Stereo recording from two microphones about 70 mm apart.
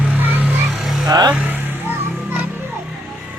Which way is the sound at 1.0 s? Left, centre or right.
Right.